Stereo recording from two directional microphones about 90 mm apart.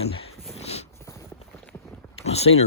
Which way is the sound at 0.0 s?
90° left.